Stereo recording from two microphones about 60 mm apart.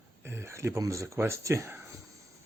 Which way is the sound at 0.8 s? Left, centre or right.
Right.